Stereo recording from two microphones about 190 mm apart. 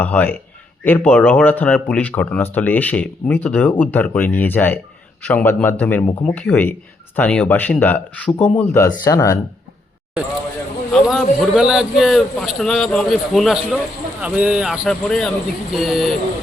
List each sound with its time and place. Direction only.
0.0 s speech: 10° left (ahead or behind)
10.9 s a man's voice: centre (ahead or behind)